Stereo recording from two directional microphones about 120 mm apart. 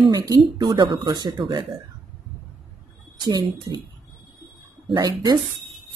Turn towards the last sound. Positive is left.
turn(degrees=-35)  # may be behind; listen again after turning